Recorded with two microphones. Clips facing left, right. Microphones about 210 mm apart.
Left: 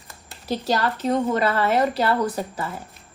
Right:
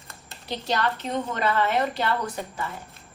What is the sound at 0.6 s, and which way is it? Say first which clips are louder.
A woman's voice: left 3 dB; 40° left (ahead or behind).